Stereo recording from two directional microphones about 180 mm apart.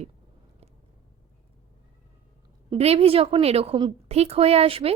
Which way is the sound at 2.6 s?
35° right (ahead or behind).